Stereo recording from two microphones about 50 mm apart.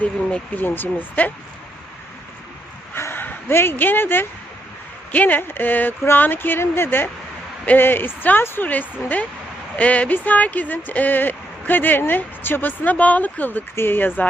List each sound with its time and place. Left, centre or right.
0.0 s speech: left
0.5 s speech: left
2.9 s dog: left
5.1 s speech: left
8.6 s speech: left